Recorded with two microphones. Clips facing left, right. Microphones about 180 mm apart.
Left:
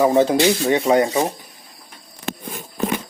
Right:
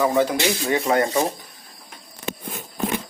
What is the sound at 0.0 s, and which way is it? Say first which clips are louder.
Speech: left 5 dB; 25° left (ahead or behind).